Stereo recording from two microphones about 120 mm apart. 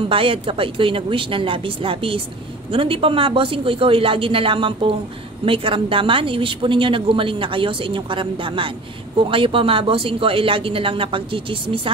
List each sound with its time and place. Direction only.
0.1 s speech: 50° right (ahead or behind)